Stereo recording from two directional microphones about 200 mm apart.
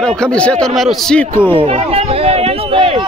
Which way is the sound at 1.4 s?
30° right (ahead or behind).